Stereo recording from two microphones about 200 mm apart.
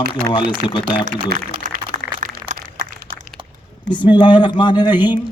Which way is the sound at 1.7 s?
45° right (ahead or behind).